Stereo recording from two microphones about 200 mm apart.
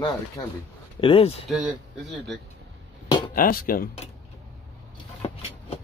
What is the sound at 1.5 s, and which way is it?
Speech, centre (ahead or behind).